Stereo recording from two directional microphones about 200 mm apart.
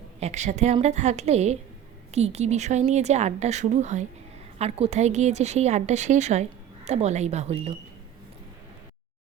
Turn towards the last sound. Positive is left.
turn(degrees=-30)  # may be behind; listen again after turning